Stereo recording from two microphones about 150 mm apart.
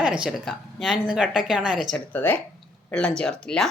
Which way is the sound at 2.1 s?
10° left (ahead or behind).